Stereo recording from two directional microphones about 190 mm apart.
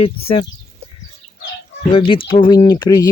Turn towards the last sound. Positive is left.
turn(degrees=20)  # may be behind; listen again after turning